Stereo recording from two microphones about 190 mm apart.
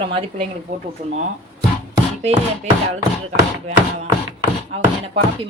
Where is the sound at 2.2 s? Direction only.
35° right (ahead or behind).